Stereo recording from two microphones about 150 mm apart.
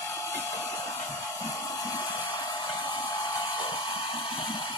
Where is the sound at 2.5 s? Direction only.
30° left (ahead or behind).